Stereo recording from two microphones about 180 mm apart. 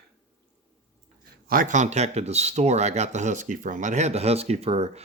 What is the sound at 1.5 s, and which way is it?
Speech, 50° right (ahead or behind).